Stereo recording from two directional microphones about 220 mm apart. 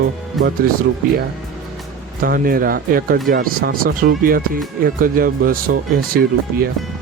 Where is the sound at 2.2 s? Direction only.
40° right (ahead or behind).